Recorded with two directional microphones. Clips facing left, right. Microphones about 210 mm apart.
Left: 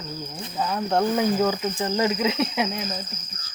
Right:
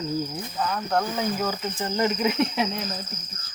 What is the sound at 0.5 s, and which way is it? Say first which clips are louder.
Speech: left 3 dB; 20° left (ahead or behind).